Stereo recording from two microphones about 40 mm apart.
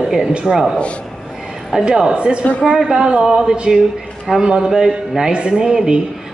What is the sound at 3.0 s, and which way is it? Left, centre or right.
A woman's voice, right.